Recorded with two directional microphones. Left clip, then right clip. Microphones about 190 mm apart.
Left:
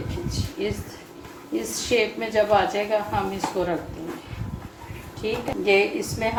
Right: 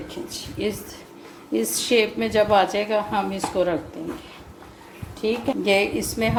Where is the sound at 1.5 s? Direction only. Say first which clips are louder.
Right 3 dB; 55° right (ahead or behind).